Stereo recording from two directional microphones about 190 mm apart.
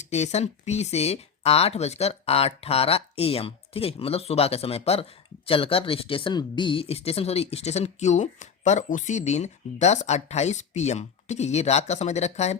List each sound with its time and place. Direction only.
0.0 s speech: 35° left (ahead or behind)